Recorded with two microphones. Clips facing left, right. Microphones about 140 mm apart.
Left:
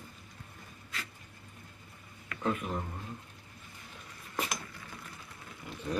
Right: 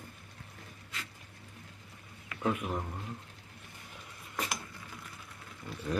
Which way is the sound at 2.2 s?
10° right (ahead or behind).